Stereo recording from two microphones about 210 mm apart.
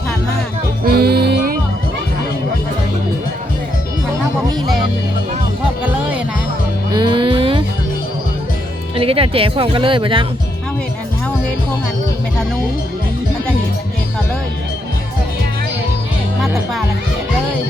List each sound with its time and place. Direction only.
0.9 s music: 45° right (ahead or behind)
6.9 s music: 20° right (ahead or behind)
9.0 s speech: 25° right (ahead or behind)